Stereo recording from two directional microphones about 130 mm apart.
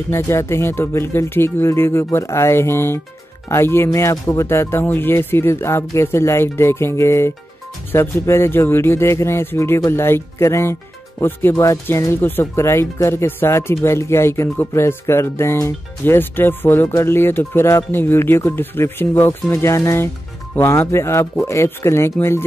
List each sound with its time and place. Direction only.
0.1 s speech: 20° left (ahead or behind)